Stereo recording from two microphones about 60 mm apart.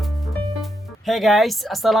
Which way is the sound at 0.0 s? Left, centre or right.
Centre.